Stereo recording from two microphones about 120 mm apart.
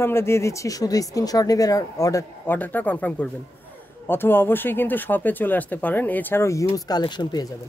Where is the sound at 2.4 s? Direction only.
15° left (ahead or behind); by 7.5 s 40° left (ahead or behind).